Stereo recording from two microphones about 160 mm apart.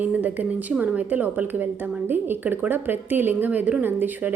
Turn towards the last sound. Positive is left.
turn(degrees=-10)  # may be behind; listen again after turning